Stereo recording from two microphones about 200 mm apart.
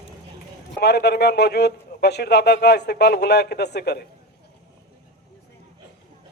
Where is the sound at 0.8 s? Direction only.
55° left (ahead or behind).